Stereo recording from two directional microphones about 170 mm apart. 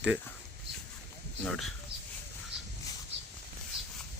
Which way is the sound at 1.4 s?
5° left (ahead or behind).